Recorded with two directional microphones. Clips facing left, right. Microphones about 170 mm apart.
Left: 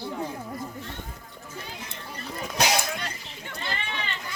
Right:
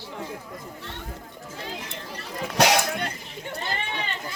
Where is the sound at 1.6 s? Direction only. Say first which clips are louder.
Right 4 dB; 85° right; by 3.1 s 65° right (ahead or behind).